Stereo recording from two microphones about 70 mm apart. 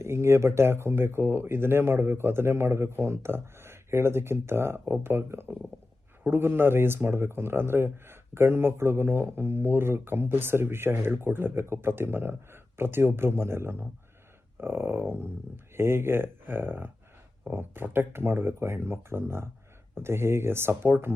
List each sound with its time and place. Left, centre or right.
0.0 s speech: right